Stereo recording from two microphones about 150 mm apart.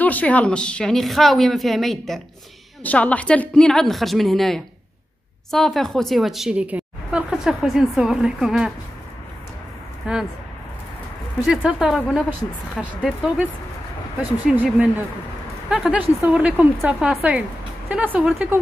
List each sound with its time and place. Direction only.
0.0 s a woman's voice: 10° left (ahead or behind)
10.1 s a woman's voice: 5° right (ahead or behind)
11.4 s a woman's voice: 5° right (ahead or behind)
14.5 s speech: 10° right (ahead or behind)